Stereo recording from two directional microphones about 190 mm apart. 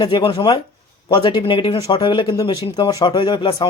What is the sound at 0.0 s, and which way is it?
Speech, 25° left (ahead or behind).